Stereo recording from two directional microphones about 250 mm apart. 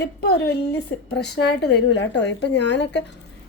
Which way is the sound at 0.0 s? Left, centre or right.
Left.